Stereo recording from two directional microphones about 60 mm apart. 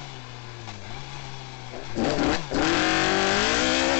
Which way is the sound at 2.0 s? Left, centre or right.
Left.